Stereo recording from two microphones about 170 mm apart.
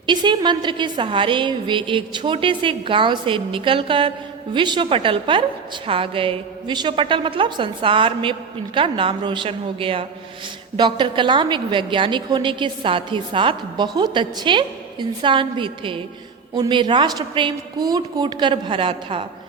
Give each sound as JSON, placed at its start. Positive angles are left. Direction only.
{"t": 0.0, "sound": "a woman's voice", "side_deg": -25}